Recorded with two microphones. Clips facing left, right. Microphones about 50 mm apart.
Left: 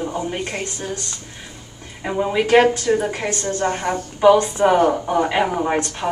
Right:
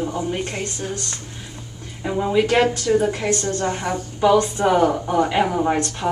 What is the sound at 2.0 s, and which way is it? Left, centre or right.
Speech, centre.